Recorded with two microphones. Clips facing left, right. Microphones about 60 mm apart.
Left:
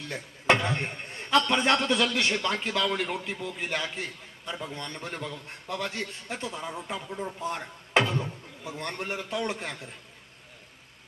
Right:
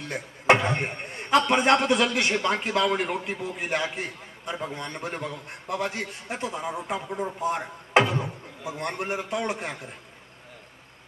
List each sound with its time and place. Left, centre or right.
0.1 s a man's voice: centre